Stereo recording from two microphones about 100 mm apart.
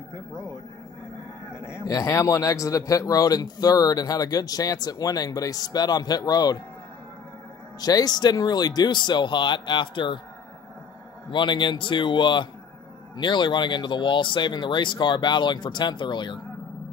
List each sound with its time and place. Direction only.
1.5 s livestock: 10° right (ahead or behind)
1.9 s speech: 35° left (ahead or behind)
7.8 s speech: 40° left (ahead or behind)
11.2 s speech: 50° left (ahead or behind)